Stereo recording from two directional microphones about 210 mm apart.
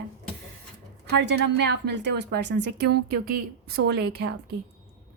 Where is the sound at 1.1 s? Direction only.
55° right (ahead or behind).